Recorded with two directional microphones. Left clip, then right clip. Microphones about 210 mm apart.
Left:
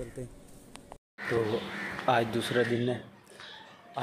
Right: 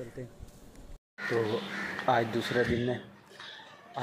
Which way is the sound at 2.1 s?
Centre (ahead or behind).